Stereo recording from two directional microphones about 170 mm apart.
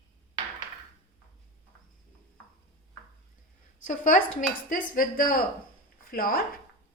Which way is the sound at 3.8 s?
50° left (ahead or behind).